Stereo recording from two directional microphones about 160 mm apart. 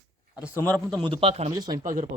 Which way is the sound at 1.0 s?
30° right (ahead or behind).